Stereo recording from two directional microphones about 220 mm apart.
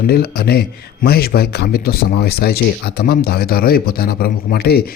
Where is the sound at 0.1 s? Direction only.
45° left (ahead or behind).